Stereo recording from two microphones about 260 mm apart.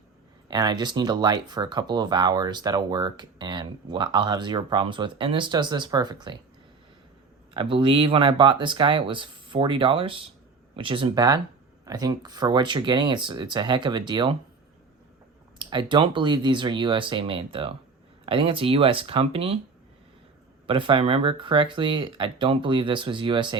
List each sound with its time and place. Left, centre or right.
0.4 s speech: centre
7.5 s speech: centre
15.5 s speech: centre
20.7 s speech: centre